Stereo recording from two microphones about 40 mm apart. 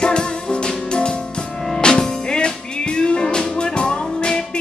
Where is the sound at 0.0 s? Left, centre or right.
Left.